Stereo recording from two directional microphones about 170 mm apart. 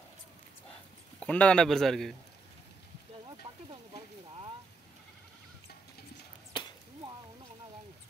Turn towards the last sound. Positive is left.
turn(degrees=25)  # may be behind; listen again after turning